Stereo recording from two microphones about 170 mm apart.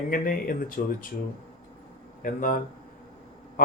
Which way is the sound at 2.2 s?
55° left (ahead or behind).